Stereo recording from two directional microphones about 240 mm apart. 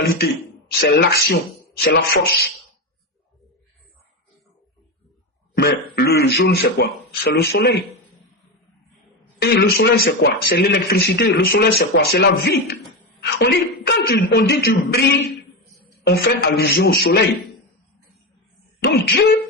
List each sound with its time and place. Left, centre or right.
0.8 s a man's voice: left
5.5 s a man's voice: left
9.4 s speech: left
18.8 s speech: left